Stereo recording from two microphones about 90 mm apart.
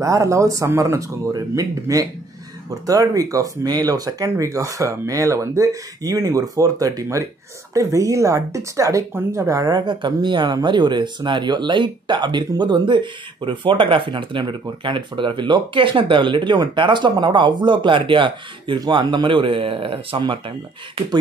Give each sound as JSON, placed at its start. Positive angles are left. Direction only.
{"t": 0.0, "sound": "speech", "side_deg": -35}
{"t": 18.8, "sound": "speech", "side_deg": -55}
{"t": 20.2, "sound": "speech", "side_deg": -70}